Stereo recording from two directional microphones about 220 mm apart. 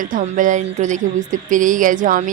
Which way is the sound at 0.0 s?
35° right (ahead or behind).